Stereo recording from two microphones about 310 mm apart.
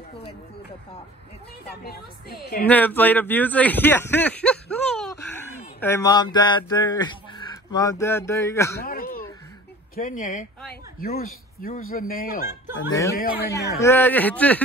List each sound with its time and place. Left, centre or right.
1.7 s a woman's voice: left
2.6 s speech: centre
8.8 s a woman's voice: left
13.7 s a man's voice: centre